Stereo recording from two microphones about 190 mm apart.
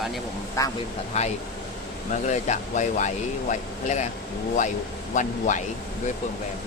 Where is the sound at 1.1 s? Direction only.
35° left (ahead or behind).